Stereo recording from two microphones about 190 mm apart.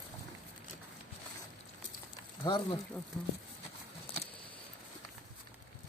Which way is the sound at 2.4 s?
25° left (ahead or behind).